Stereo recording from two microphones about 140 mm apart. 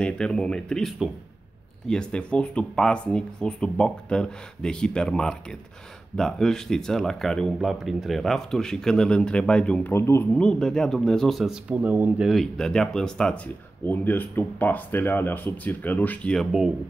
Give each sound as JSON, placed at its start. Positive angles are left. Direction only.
{"t": 0.0, "sound": "speech", "side_deg": 5}
{"t": 10.4, "sound": "speech", "side_deg": 5}
{"t": 12.3, "sound": "speech", "side_deg": 5}